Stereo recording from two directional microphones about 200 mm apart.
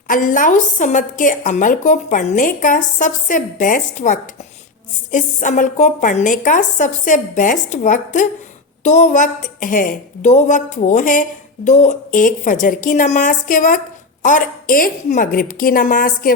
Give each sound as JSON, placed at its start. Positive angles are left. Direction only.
{"t": 0.1, "sound": "a woman's voice", "side_deg": 40}